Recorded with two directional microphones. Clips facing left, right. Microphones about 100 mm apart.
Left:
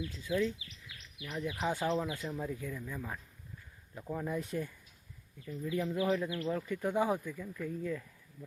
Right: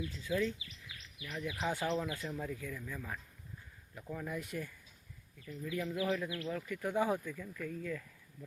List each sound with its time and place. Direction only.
0.3 s speech: 15° left (ahead or behind)